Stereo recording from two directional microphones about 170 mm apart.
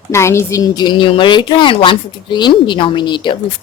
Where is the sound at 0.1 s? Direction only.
15° left (ahead or behind).